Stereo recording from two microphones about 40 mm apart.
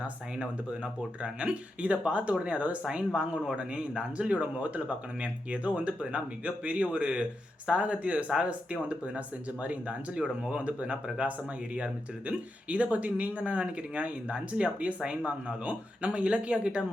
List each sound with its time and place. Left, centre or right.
1.2 s speech: right
10.2 s speech: centre
10.6 s speech: right